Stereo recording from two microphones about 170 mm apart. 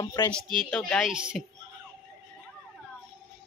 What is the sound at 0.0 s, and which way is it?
Speech, 25° left (ahead or behind).